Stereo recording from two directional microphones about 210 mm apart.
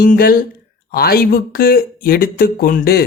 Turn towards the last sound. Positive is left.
turn(degrees=45)  # may be behind; listen again after turning